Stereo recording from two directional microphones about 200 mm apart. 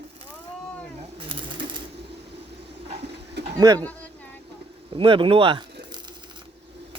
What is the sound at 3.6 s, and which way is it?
Speech, 15° right (ahead or behind).